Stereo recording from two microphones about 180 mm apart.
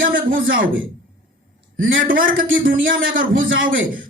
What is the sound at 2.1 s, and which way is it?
Speech, 50° right (ahead or behind).